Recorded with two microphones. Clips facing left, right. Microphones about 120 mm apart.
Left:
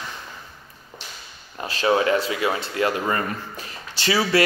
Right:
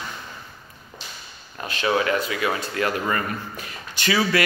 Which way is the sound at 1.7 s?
30° left (ahead or behind).